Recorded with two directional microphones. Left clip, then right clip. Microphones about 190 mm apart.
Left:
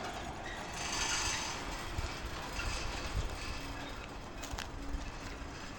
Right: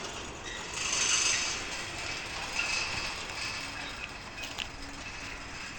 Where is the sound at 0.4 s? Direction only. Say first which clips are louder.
Right 8 dB; 55° left (ahead or behind).